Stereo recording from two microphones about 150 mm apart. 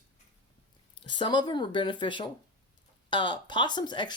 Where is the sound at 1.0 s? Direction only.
30° left (ahead or behind).